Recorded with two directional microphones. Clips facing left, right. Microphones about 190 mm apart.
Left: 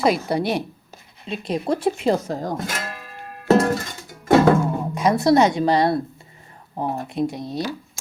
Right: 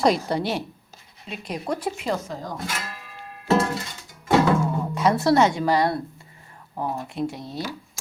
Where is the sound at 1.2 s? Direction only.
25° left (ahead or behind).